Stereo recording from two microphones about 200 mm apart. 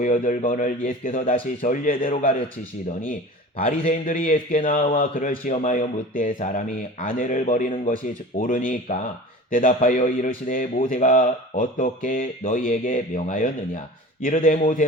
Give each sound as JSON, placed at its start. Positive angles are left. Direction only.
{"t": 0.0, "sound": "a man's voice", "side_deg": 40}
{"t": 3.6, "sound": "a man's voice", "side_deg": 35}